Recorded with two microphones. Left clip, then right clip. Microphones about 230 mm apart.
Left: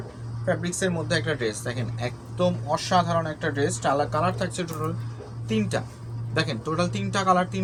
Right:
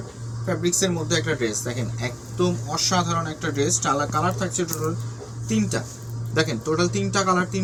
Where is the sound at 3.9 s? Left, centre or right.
Left.